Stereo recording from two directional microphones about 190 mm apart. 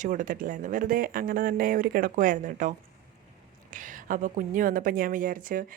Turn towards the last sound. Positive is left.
turn(degrees=-45)  # may be behind; listen again after turning